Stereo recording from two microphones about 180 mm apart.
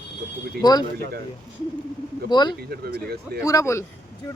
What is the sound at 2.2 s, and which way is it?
Speech, 25° left (ahead or behind).